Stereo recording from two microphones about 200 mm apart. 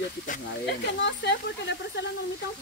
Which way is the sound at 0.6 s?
55° left (ahead or behind).